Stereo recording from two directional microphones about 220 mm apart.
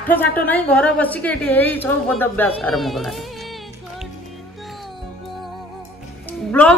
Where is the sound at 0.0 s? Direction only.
10° left (ahead or behind).